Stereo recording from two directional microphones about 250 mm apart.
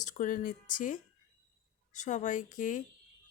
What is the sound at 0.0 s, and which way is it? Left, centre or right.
Speech, left.